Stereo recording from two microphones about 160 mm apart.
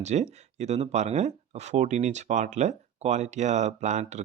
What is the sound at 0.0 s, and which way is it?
Speech, 45° right (ahead or behind).